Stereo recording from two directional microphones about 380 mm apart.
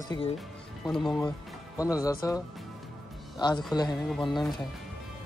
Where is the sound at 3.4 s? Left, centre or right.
Centre.